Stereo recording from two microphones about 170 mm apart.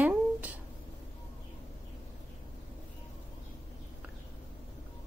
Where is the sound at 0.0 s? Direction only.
10° right (ahead or behind).